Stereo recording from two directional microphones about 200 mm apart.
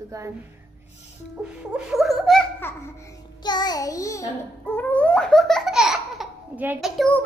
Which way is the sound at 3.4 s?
20° left (ahead or behind).